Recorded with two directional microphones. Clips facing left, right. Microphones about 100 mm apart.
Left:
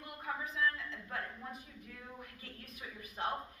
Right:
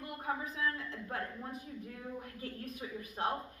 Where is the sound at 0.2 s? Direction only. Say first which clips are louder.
Left 1 dB; 35° right (ahead or behind).